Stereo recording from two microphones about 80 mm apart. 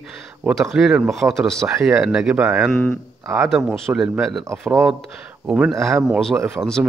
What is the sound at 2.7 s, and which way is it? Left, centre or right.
Speech, left.